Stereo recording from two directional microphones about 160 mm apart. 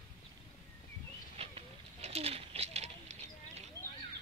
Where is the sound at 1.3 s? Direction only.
40° right (ahead or behind).